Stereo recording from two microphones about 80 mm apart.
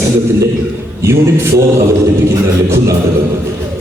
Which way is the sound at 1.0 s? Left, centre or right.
Right.